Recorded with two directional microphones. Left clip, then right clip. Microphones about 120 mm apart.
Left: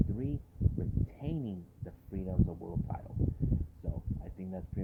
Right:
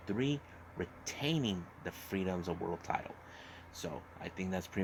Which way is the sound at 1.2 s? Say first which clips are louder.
Right 9 dB; 5° right (ahead or behind).